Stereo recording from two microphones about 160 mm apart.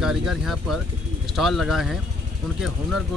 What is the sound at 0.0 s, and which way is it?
Speech, centre (ahead or behind).